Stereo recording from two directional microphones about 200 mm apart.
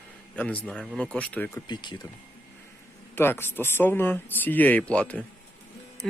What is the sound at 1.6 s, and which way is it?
Speech, 20° left (ahead or behind).